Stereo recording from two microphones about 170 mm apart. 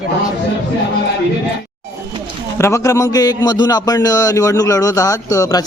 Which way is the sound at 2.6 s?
15° left (ahead or behind).